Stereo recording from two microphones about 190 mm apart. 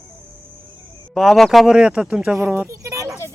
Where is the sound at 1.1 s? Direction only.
Centre (ahead or behind); by 3.1 s 15° right (ahead or behind).